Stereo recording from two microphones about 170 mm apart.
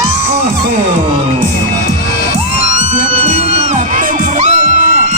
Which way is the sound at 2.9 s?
40° right (ahead or behind).